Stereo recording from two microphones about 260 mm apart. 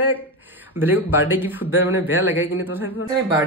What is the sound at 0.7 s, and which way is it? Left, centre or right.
Speech, centre.